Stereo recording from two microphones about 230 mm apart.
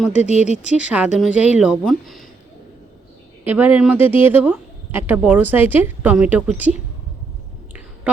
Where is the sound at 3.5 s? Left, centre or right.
Centre.